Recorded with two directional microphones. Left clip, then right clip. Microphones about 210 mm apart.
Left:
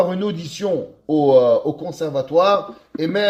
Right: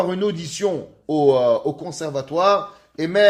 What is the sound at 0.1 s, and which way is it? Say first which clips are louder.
Speech: right 1 dB; 25° left (ahead or behind).